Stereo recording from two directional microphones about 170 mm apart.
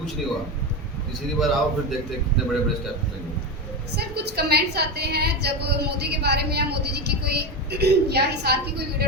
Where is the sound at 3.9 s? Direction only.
70° right (ahead or behind).